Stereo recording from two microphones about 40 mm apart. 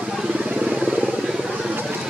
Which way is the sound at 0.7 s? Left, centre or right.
Centre.